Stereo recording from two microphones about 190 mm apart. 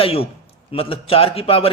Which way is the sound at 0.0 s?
30° left (ahead or behind).